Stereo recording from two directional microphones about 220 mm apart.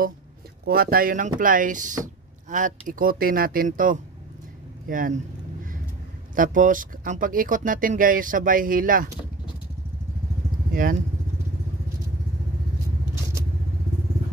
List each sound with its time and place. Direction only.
0.7 s speech: 40° right (ahead or behind)
6.3 s speech: 40° right (ahead or behind)
10.7 s speech: 40° right (ahead or behind)